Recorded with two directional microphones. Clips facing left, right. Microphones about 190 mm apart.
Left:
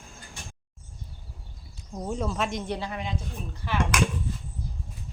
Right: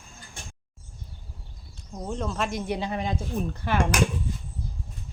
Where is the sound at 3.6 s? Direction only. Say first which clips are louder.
Right 2 dB; 50° right (ahead or behind).